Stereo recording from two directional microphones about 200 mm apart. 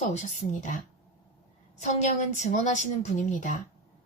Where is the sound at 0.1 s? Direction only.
35° left (ahead or behind).